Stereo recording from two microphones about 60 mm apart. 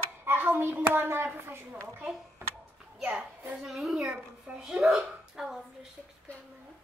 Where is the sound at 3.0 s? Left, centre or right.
Right.